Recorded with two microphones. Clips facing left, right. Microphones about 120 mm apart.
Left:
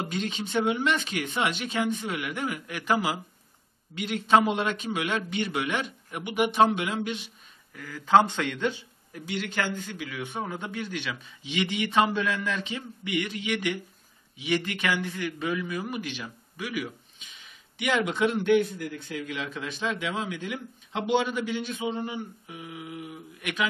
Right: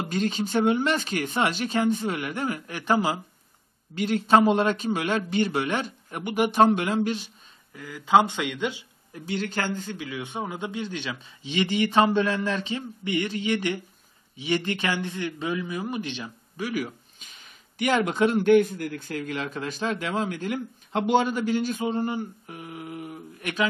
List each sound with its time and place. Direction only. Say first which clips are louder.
0.1 s speech: right 8 dB; 40° right (ahead or behind)
7.7 s speech: even; 15° right (ahead or behind)
9.1 s a man's voice: right 3 dB; 30° right (ahead or behind)
16.8 s a man's voice: right 2 dB; 45° right (ahead or behind)